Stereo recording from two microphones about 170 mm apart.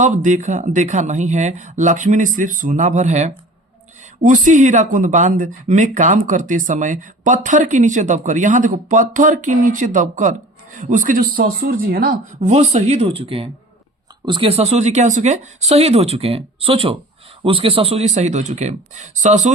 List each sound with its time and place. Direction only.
0.0 s speech: 45° right (ahead or behind)